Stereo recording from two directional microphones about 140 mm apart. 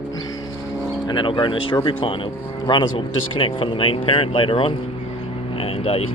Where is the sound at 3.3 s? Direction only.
40° left (ahead or behind).